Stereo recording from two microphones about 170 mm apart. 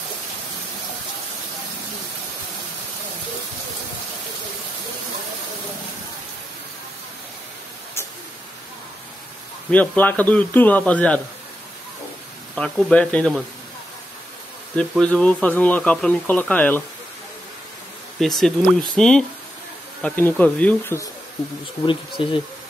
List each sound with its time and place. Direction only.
9.7 s speech: 10° left (ahead or behind)
12.5 s speech: 5° left (ahead or behind)
14.8 s speech: 5° left (ahead or behind)
18.2 s speech: centre (ahead or behind)
21.8 s speech: 30° left (ahead or behind)